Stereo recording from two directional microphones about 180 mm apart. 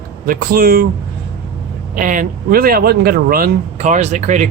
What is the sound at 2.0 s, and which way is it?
Speech, 50° right (ahead or behind).